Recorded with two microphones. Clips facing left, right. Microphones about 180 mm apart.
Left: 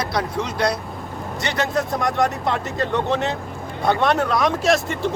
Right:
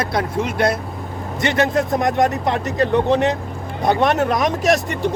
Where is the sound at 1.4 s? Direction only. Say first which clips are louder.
Right 5 dB; 20° right (ahead or behind).